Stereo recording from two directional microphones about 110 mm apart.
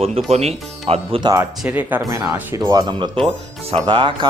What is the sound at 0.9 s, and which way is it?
Speech, 60° right (ahead or behind).